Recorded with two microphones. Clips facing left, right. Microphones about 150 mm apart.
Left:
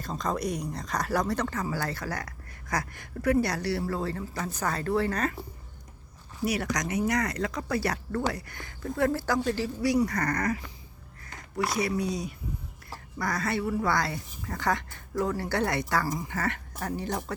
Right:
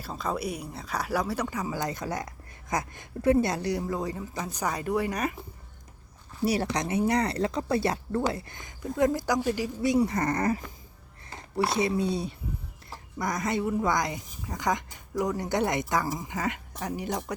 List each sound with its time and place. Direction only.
0.0 s speech: 5° right (ahead or behind)
6.4 s speech: 30° right (ahead or behind); by 17.2 s 10° right (ahead or behind)